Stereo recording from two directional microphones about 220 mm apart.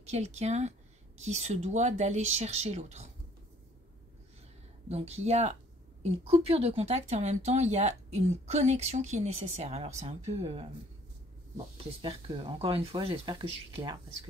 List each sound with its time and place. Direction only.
0.0 s speech: 30° right (ahead or behind)
4.8 s speech: 30° right (ahead or behind)